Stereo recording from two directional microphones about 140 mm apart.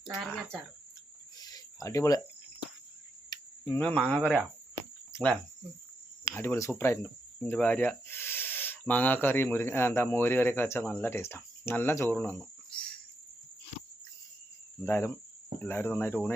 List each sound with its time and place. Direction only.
0.1 s speech: centre (ahead or behind)
1.4 s cricket: 25° left (ahead or behind)
4.0 s speech: 10° left (ahead or behind)
14.8 s speech: 15° left (ahead or behind)